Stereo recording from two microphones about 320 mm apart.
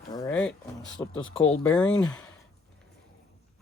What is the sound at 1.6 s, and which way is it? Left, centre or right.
Speech, centre.